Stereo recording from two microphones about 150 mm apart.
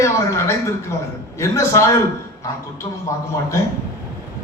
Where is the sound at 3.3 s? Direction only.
20° left (ahead or behind).